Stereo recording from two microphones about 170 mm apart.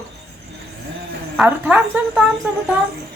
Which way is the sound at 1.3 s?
5° right (ahead or behind).